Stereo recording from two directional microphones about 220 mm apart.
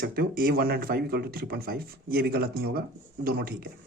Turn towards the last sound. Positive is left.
turn(degrees=-45)  # may be behind; listen again after turning